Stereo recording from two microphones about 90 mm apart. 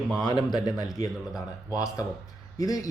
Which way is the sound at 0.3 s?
50° left (ahead or behind).